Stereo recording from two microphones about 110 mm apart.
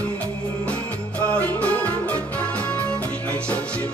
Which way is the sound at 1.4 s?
15° left (ahead or behind).